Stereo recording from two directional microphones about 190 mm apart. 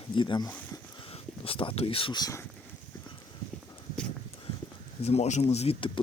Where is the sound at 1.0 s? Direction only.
30° left (ahead or behind).